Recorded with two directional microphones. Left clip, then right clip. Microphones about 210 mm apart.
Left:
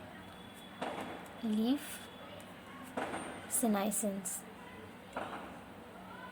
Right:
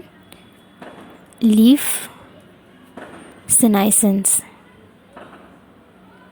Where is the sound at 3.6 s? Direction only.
50° right (ahead or behind).